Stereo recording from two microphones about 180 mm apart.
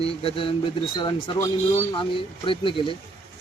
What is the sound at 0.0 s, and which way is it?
Speech, 30° left (ahead or behind).